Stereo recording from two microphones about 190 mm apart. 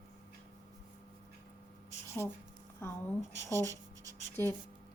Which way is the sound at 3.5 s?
15° right (ahead or behind).